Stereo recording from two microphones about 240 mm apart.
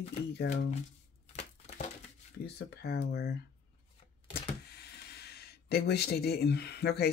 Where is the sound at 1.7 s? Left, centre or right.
Left.